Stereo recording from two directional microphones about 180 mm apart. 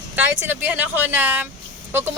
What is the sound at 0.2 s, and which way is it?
Speech, 10° right (ahead or behind).